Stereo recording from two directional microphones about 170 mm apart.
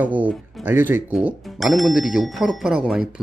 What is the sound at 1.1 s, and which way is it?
Speech, centre (ahead or behind).